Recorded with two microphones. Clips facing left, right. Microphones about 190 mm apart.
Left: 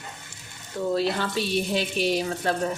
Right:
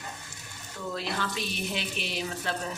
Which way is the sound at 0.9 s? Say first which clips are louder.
Left 6 dB; 35° left (ahead or behind).